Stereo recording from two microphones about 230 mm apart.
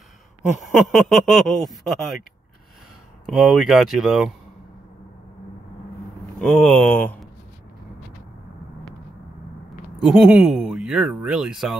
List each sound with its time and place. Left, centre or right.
0.9 s speech: centre
3.3 s speech: centre
6.4 s speech: centre
9.9 s speech: centre